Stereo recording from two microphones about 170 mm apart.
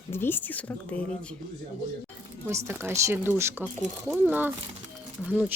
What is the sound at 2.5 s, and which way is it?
Speech, 15° right (ahead or behind).